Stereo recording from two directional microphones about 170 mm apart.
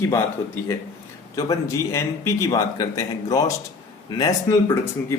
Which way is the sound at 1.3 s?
20° left (ahead or behind).